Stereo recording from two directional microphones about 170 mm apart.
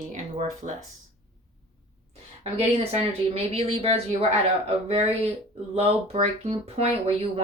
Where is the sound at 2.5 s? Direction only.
35° right (ahead or behind).